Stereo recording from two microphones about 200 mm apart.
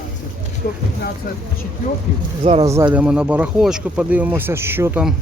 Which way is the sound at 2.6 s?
15° right (ahead or behind).